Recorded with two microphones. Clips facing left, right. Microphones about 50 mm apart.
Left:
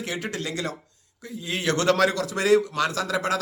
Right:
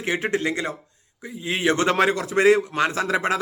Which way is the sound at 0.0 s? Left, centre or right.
Right.